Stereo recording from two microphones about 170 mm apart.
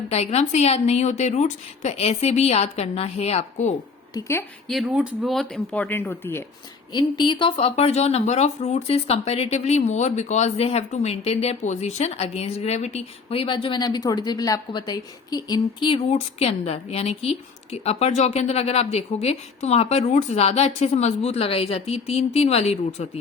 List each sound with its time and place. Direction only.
0.1 s speech: 40° left (ahead or behind)
4.1 s a woman's voice: 15° left (ahead or behind)
4.7 s speech: 5° right (ahead or behind)
6.9 s speech: 25° left (ahead or behind)